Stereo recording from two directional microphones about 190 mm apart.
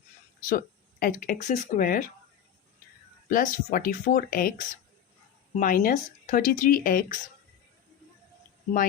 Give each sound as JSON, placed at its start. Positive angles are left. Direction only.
{"t": 0.4, "sound": "speech", "side_deg": 45}
{"t": 3.2, "sound": "speech", "side_deg": 45}